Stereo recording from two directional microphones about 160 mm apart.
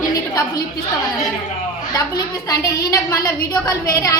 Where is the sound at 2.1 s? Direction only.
20° left (ahead or behind).